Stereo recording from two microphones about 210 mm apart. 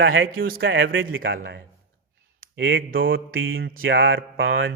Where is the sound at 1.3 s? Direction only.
50° right (ahead or behind).